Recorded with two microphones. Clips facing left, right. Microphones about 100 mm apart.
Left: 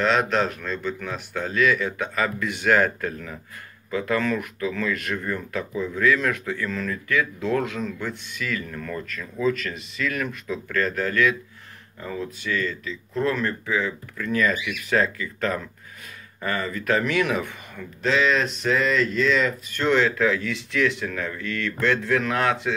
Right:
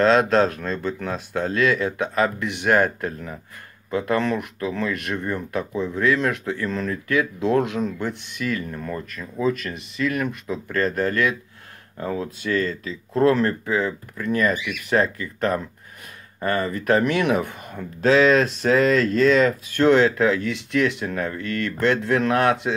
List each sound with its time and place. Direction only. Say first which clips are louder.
0.4 s speech: right 4 dB; 35° right (ahead or behind)
1.9 s speech: right 4 dB; 25° right (ahead or behind)
12.0 s speech: right 4 dB; 50° right (ahead or behind)
14.2 s speech: right 2 dB; 20° right (ahead or behind)
16.3 s speech: right 4 dB; 45° right (ahead or behind)
16.6 s speech: right 3 dB; 25° right (ahead or behind)
17.7 s speech: right 6 dB; 40° right (ahead or behind)
21.9 s speech: right 2 dB; 25° right (ahead or behind)
22.2 s speech: right 4 dB; 50° right (ahead or behind)
22.5 s speech: right 3 dB; 25° right (ahead or behind)